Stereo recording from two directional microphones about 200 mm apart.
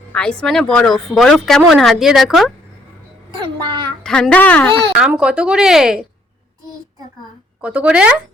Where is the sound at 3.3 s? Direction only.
25° right (ahead or behind).